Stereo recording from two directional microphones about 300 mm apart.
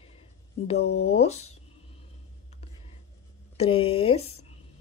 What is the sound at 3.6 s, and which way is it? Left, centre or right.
Speech, centre.